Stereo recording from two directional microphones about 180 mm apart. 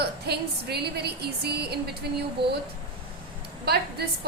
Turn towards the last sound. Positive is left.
turn(degrees=-65)  # may be behind; listen again after turning